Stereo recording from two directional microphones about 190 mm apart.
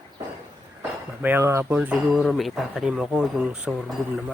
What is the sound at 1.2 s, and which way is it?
Speech, 10° right (ahead or behind).